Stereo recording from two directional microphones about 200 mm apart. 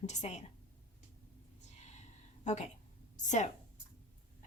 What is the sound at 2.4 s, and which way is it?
A woman's voice, 35° left (ahead or behind).